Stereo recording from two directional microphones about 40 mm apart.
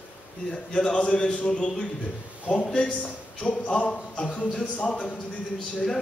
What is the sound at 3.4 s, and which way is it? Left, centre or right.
Speech, left.